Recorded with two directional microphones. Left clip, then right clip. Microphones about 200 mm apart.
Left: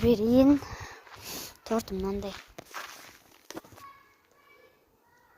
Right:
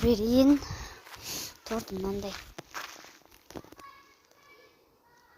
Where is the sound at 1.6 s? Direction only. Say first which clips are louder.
Left 6 dB; 55° left (ahead or behind).